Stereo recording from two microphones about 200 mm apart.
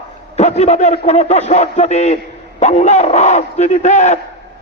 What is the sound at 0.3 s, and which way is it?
A man's voice, 35° left (ahead or behind).